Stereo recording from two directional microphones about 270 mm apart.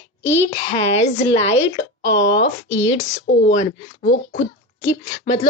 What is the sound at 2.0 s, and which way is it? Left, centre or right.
Speech, left.